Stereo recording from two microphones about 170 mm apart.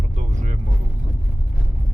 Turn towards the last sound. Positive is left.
turn(degrees=-45)  # may be behind; listen again after turning